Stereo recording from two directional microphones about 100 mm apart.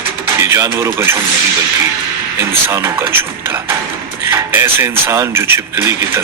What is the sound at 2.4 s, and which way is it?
Speech, 25° right (ahead or behind).